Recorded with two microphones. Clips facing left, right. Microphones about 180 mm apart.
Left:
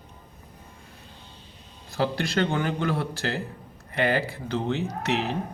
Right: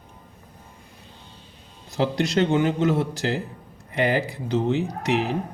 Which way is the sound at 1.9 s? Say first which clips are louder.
Right 3 dB; 20° right (ahead or behind).